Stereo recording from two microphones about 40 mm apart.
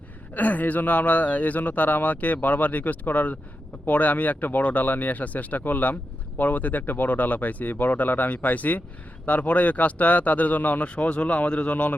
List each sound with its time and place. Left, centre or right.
0.3 s speech: left